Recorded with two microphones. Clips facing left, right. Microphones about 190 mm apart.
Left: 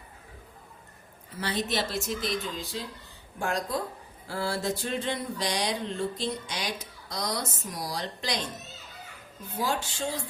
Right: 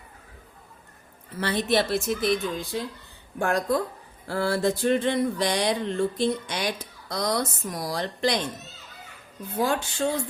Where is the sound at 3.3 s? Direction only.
55° right (ahead or behind).